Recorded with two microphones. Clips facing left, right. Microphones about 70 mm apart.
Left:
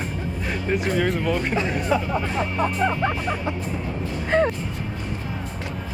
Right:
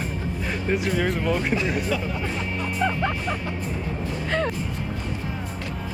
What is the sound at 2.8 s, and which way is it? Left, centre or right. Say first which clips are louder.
Speech: left 2 dB; centre.